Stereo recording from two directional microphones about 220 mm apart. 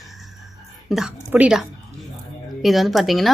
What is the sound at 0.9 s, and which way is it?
A woman's voice, 5° right (ahead or behind).